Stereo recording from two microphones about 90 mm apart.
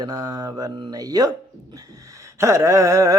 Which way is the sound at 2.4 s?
35° right (ahead or behind).